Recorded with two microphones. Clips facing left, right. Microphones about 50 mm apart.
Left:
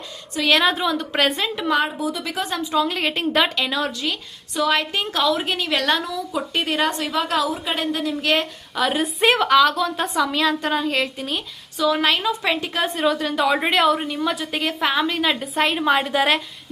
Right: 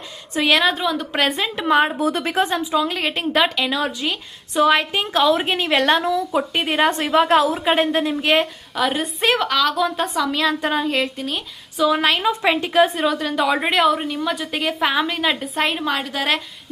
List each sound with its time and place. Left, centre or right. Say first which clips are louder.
0.4 s a woman's voice: even; centre
1.5 s a woman's voice: right 7 dB; right
2.0 s a woman's voice: right 5 dB; right
2.2 s a woman's voice: right 6 dB; right
2.5 s a woman's voice: right 3 dB; centre
2.7 s a woman's voice: left 2 dB; centre
3.9 s a woman's voice: right 1 dB; centre
5.3 s a woman's voice: right 4 dB; right
6.9 s a woman's voice: right 6 dB; right
8.1 s a woman's voice: right 1 dB; centre
8.7 s a woman's voice: left 1 dB; centre
11.8 s a woman's voice: right 2 dB; centre
15.8 s a woman's voice: left 4 dB; centre